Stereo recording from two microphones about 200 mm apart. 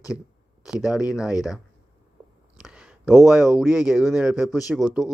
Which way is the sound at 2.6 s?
5° right (ahead or behind).